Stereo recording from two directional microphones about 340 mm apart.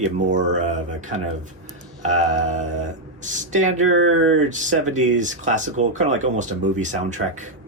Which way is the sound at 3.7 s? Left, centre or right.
Right.